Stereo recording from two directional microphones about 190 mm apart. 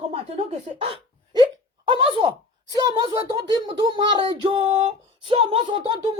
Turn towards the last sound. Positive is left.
turn(degrees=-25)  # may be behind; listen again after turning